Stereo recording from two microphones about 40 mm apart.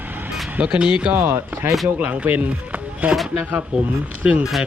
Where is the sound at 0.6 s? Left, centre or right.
Right.